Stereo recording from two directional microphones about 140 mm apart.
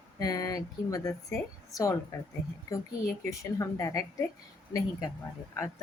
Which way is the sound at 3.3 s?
25° left (ahead or behind).